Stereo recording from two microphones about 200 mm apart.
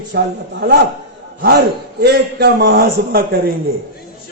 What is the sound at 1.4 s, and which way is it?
A man's voice, 55° right (ahead or behind).